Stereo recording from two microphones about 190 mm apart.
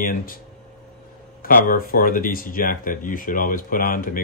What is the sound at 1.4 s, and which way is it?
Speech, 50° left (ahead or behind).